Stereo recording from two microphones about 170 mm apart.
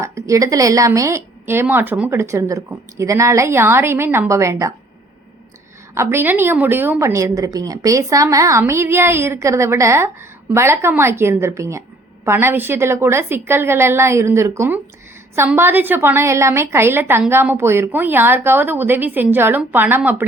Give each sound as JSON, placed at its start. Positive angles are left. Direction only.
{"t": 0.0, "sound": "a woman's voice", "side_deg": -20}
{"t": 5.9, "sound": "a woman's voice", "side_deg": -15}